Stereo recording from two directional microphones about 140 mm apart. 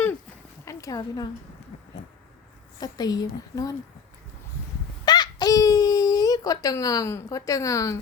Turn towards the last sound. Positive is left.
turn(degrees=25)  # may be behind; listen again after turning